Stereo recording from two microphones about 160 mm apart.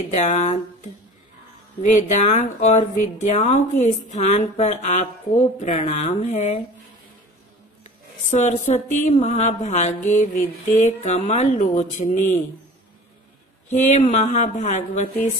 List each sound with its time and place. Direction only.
0.1 s speech: 45° left (ahead or behind)
2.0 s speech: 45° left (ahead or behind)
8.3 s speech: 50° left (ahead or behind)
13.7 s speech: 50° left (ahead or behind)